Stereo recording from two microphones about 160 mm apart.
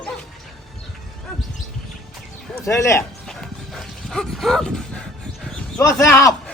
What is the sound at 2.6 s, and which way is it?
Speech, 20° left (ahead or behind).